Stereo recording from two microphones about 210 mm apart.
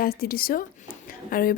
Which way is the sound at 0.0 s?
45° left (ahead or behind).